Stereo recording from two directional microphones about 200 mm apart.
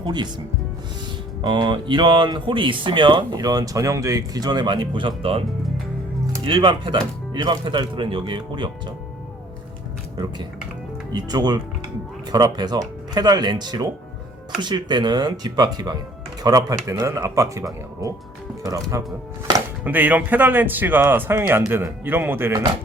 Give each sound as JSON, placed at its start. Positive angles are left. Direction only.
{"t": 0.0, "sound": "speech", "side_deg": -20}
{"t": 1.4, "sound": "speech", "side_deg": -20}
{"t": 11.1, "sound": "speech", "side_deg": -20}